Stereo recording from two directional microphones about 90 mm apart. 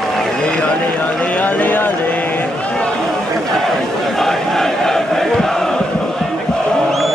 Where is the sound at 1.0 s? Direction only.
15° left (ahead or behind).